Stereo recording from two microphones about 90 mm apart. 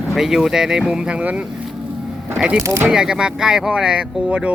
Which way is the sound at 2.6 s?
30° right (ahead or behind).